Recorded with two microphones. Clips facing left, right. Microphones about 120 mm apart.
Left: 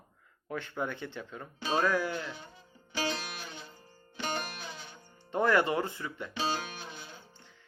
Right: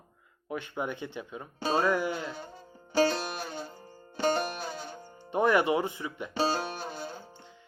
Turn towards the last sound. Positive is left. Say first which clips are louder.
# right 8 dB
turn(degrees=-40)  # may be behind; listen again after turning